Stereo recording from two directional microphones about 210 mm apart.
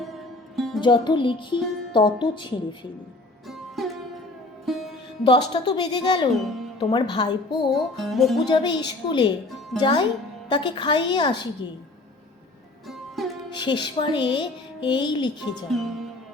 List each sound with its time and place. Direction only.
0.0 s music: centre (ahead or behind)
0.8 s music: 20° left (ahead or behind)
4.6 s music: centre (ahead or behind)
5.2 s music: 20° left (ahead or behind)
6.4 s speech: centre (ahead or behind)
6.7 s music: 20° left (ahead or behind)
7.7 s music: centre (ahead or behind)
8.4 s music: 20° left (ahead or behind)
12.9 s music: centre (ahead or behind)
13.5 s music: 20° left (ahead or behind)
15.7 s music: centre (ahead or behind)